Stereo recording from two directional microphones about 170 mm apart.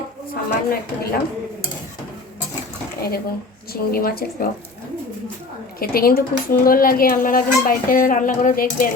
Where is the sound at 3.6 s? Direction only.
60° left (ahead or behind).